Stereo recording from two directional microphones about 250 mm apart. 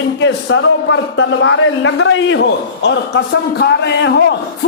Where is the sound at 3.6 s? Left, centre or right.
Left.